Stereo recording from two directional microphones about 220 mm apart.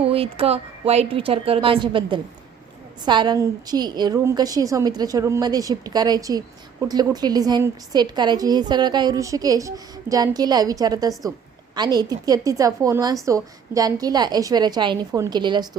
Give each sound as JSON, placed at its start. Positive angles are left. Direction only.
{"t": 0.0, "sound": "a woman's voice", "side_deg": -25}